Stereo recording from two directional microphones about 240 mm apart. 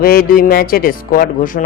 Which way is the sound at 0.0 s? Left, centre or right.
Left.